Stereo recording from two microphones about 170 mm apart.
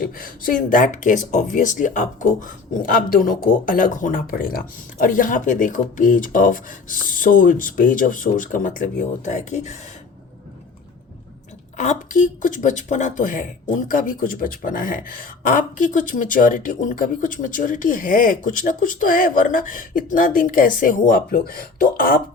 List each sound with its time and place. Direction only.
0.0 s speech: 55° left (ahead or behind)
11.8 s speech: 45° left (ahead or behind)